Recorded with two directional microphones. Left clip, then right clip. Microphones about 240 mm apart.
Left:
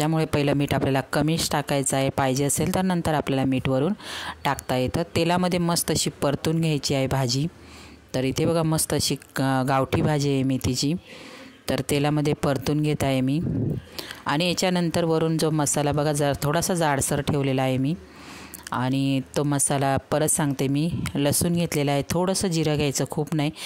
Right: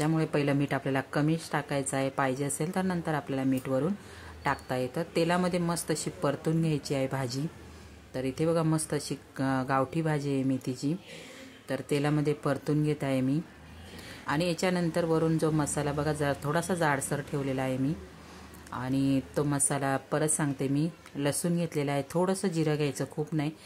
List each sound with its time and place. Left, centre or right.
0.0 s a woman's voice: left